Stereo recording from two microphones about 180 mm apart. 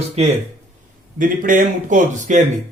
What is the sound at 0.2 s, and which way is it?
Speech, 35° right (ahead or behind).